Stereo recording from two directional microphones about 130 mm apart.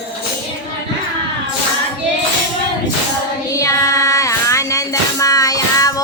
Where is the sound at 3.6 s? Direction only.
25° left (ahead or behind).